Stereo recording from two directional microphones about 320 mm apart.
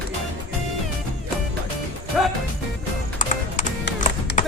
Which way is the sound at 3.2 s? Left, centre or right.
Left.